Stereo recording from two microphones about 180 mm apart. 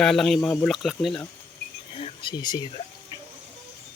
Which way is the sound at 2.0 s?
25° left (ahead or behind).